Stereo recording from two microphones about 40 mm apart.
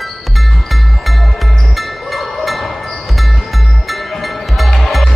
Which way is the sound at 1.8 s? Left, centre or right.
Centre.